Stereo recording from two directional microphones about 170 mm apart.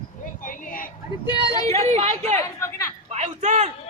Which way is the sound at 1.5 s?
20° left (ahead or behind).